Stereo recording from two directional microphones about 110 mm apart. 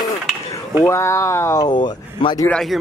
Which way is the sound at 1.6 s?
45° left (ahead or behind).